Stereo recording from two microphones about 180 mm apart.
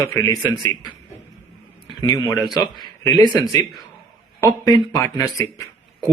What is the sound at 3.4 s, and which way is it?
Speech, 20° left (ahead or behind).